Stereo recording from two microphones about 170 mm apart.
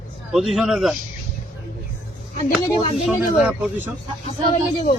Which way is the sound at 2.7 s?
25° left (ahead or behind).